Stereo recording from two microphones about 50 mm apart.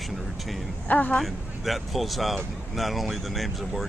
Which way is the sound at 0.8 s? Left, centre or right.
Left.